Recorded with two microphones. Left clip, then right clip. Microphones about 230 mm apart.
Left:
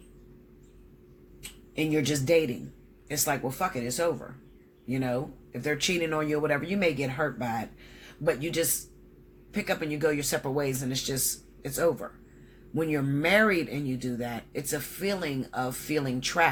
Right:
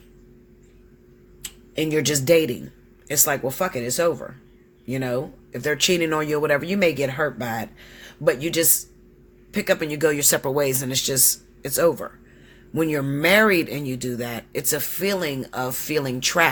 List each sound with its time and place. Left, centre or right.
1.4 s speech: right